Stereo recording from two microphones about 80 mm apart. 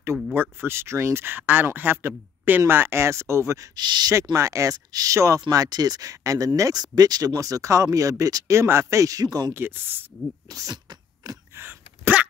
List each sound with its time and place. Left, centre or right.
0.0 s speech: right
3.7 s speech: right
4.1 s speech: right
8.5 s speech: right
9.5 s speech: right
10.5 s a sound: right
11.5 s sneeze: right